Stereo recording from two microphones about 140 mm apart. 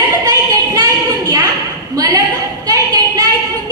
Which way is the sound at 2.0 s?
25° right (ahead or behind).